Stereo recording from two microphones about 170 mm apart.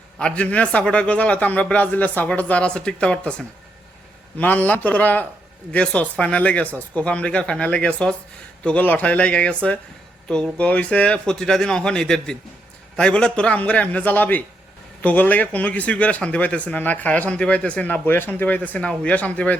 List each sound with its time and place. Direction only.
0.2 s speech: 5° left (ahead or behind)